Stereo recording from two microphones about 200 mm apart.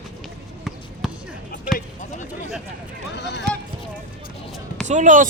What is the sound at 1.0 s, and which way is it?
Basketball bounce, centre (ahead or behind).